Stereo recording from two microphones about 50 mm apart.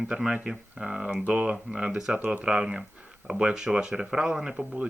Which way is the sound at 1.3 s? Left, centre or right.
Right.